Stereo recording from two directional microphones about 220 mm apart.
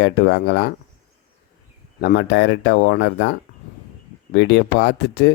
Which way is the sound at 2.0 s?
50° left (ahead or behind).